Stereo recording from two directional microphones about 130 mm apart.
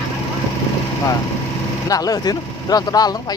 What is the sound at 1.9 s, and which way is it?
Speech, 30° left (ahead or behind).